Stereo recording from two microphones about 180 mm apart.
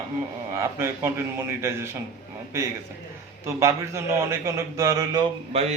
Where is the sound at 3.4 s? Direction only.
15° right (ahead or behind).